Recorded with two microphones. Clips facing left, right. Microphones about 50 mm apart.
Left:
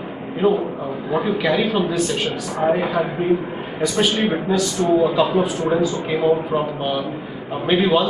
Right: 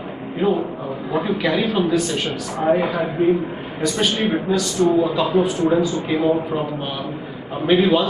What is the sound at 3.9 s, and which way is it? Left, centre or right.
A man's voice, centre.